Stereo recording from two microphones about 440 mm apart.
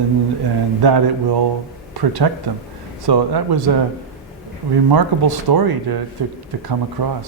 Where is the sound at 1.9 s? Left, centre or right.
Right.